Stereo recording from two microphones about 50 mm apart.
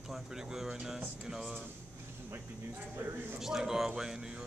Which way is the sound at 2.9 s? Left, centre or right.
Right.